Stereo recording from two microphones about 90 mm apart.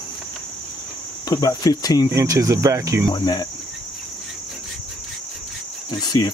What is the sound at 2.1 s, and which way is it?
Speech, 40° right (ahead or behind).